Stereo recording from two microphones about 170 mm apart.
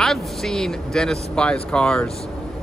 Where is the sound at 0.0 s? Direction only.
5° left (ahead or behind).